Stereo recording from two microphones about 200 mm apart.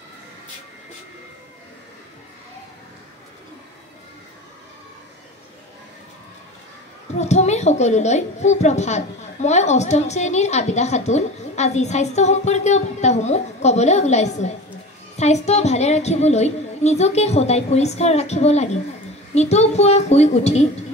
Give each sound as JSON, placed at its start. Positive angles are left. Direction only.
{"t": 7.2, "sound": "a woman's voice", "side_deg": 35}